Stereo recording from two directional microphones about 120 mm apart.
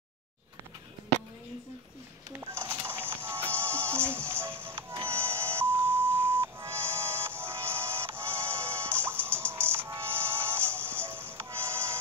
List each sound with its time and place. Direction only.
2.3 s music: 20° right (ahead or behind)